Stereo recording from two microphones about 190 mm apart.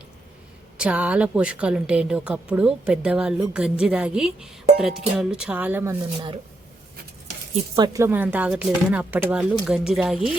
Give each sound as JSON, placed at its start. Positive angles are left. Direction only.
{"t": 0.8, "sound": "a woman's voice", "side_deg": -5}
{"t": 7.8, "sound": "speech", "side_deg": -15}